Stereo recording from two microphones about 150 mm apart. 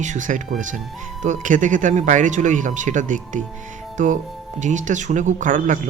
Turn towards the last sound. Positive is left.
turn(degrees=-60)  # may be behind; listen again after turning